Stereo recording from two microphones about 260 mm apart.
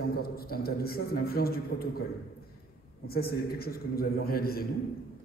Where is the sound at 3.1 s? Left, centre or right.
Left.